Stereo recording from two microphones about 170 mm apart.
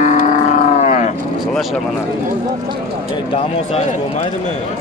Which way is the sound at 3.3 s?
40° left (ahead or behind).